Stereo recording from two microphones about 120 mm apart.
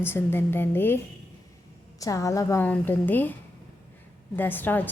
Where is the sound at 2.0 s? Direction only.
25° left (ahead or behind).